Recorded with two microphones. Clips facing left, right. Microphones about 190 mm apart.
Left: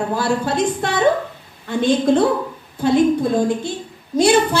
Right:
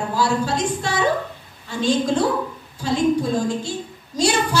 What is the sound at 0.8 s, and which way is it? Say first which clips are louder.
A woman's voice: left 5 dB; 55° left (ahead or behind).